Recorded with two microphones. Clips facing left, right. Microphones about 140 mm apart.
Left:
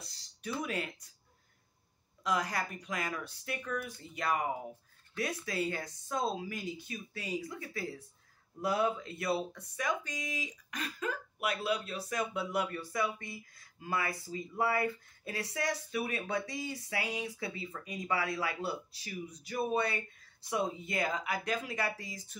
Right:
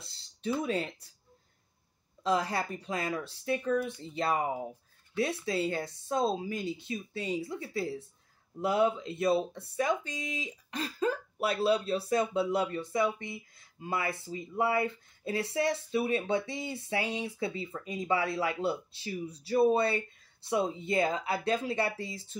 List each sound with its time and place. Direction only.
0.6 s speech: 30° right (ahead or behind)
2.2 s speech: 30° right (ahead or behind)